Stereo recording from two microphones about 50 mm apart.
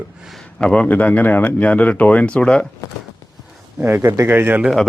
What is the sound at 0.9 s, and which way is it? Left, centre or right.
Speech, left.